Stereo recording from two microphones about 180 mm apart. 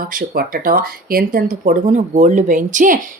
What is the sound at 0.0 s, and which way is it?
Speech, 50° right (ahead or behind).